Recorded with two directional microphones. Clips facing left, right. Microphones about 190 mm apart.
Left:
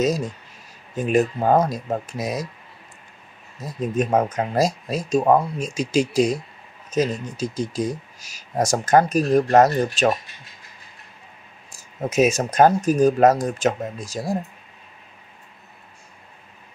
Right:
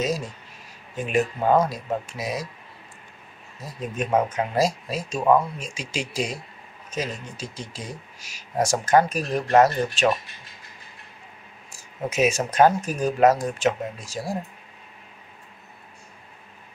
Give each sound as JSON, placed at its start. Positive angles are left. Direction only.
{"t": 0.9, "sound": "speech", "side_deg": 40}
{"t": 3.9, "sound": "speech", "side_deg": 40}
{"t": 12.1, "sound": "speech", "side_deg": 40}